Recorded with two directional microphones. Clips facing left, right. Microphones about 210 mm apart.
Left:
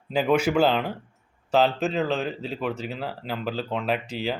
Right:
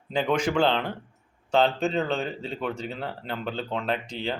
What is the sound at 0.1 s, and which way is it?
Speech, 5° left (ahead or behind).